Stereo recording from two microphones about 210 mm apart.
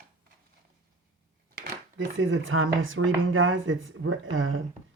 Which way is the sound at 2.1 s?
65° right (ahead or behind).